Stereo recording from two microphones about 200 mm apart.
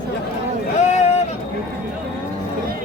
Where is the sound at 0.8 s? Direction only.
35° left (ahead or behind).